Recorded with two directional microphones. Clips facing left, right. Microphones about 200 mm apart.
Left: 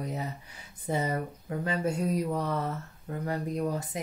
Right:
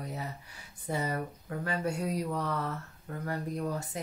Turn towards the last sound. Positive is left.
turn(degrees=20)  # may be behind; listen again after turning